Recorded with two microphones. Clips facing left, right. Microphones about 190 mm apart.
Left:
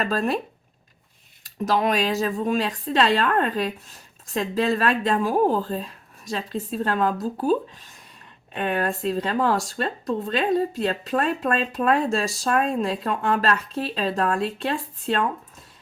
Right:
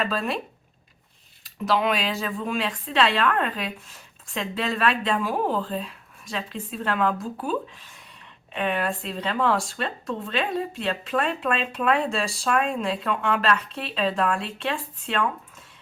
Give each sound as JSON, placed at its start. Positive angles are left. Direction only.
{"t": 0.0, "sound": "speech", "side_deg": 40}
{"t": 1.5, "sound": "speech", "side_deg": 40}